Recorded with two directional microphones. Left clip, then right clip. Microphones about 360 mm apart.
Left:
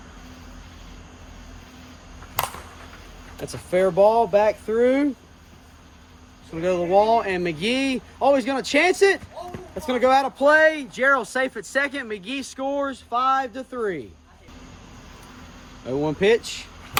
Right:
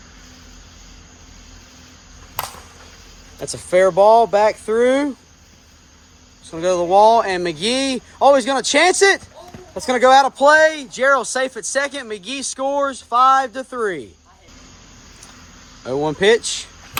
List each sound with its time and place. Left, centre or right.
3.4 s speech: centre
6.6 s speech: centre
15.9 s speech: centre